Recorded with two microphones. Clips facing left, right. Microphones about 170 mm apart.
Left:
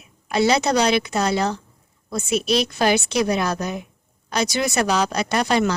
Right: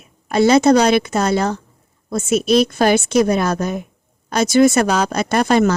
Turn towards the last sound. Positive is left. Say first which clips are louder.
# right 5 dB
turn(degrees=-50)  # may be behind; listen again after turning